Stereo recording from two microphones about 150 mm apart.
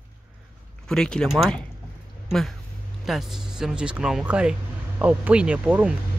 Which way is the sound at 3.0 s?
Centre (ahead or behind).